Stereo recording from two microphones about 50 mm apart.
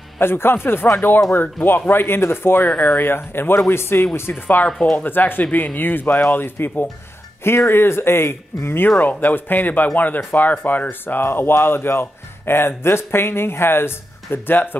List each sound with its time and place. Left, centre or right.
0.2 s speech: left
3.5 s speech: left
7.4 s speech: left
8.9 s speech: left